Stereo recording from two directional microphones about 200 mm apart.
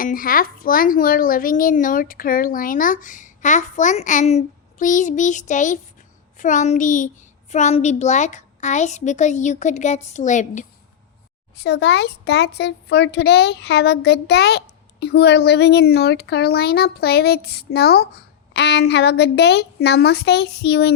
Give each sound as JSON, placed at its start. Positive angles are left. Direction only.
{"t": 0.0, "sound": "a child's voice", "side_deg": 45}
{"t": 11.5, "sound": "speech", "side_deg": 55}